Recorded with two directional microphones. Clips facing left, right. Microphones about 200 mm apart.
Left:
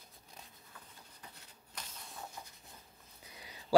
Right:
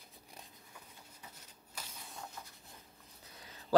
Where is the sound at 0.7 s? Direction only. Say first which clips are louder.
Even; 10° right (ahead or behind).